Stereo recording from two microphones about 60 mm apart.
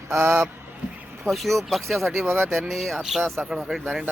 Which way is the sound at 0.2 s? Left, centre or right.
Right.